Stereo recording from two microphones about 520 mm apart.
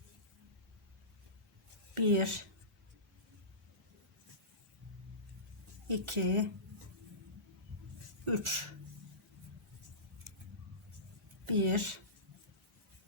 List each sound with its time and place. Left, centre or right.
2.0 s speech: right
5.9 s speech: right
8.2 s speech: right
11.4 s speech: right